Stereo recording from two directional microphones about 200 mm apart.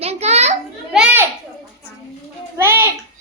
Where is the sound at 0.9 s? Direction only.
5° right (ahead or behind).